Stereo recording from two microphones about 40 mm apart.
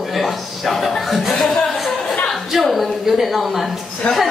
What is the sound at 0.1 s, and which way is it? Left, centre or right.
Chuckle, centre.